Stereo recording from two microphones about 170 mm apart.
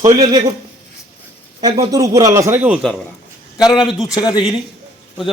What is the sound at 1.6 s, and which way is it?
A man's voice, 20° right (ahead or behind).